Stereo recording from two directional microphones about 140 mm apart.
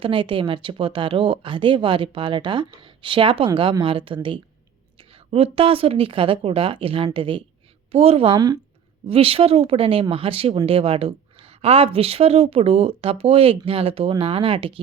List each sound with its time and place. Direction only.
0.0 s a woman's voice: 40° right (ahead or behind)